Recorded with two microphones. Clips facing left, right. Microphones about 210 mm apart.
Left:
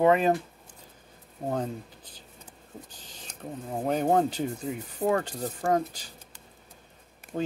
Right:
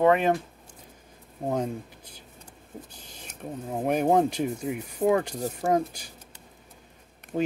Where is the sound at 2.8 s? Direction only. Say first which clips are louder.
Right 2 dB; 10° right (ahead or behind).